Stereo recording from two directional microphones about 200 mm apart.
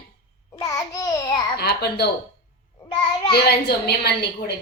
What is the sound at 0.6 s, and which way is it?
Babbling, 15° left (ahead or behind).